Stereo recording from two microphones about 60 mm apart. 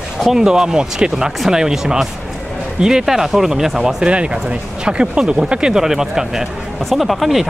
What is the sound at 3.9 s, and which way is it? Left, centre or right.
Speech, centre.